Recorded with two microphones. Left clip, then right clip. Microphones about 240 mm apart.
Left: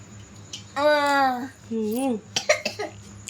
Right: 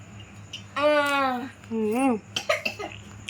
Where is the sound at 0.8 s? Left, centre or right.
Left.